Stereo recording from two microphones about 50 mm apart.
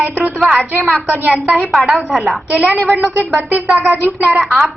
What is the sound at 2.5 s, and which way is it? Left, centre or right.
A woman's voice, right.